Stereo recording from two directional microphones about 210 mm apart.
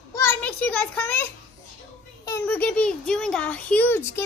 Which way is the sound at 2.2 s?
10° left (ahead or behind).